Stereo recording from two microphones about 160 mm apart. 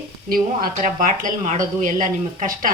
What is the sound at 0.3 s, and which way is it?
A woman's voice, 60° right (ahead or behind).